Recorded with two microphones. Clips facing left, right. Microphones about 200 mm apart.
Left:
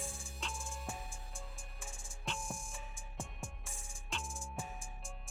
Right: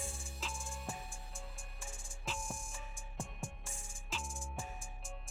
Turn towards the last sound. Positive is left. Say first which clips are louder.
# left 1 dB
turn(degrees=0)  # may be behind; listen again after turning